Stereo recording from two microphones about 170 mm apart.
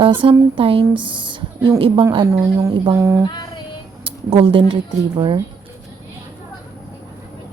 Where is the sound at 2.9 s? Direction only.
15° right (ahead or behind).